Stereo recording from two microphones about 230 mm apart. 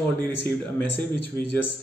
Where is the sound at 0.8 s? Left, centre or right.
Right.